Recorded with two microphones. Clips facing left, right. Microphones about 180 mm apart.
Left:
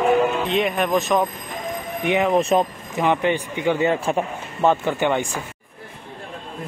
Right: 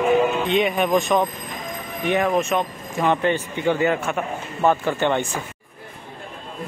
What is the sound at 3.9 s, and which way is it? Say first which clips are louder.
Speech: left 2 dB; 30° left (ahead or behind).